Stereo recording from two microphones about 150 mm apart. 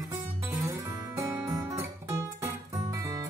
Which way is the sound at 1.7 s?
20° right (ahead or behind).